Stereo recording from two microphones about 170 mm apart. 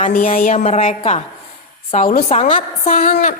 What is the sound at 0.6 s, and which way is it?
Speech, 35° left (ahead or behind).